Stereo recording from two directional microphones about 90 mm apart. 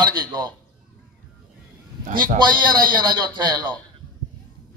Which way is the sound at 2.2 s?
55° right (ahead or behind).